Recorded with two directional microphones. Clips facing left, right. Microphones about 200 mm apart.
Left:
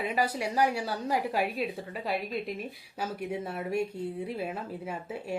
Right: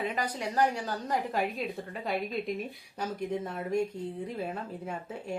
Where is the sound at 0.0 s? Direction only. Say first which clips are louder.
Left 3 dB; 10° left (ahead or behind).